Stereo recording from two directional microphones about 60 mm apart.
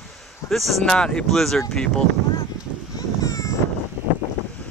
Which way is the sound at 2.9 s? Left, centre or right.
Left.